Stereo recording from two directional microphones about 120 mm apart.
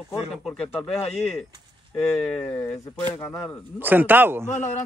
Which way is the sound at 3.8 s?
15° right (ahead or behind).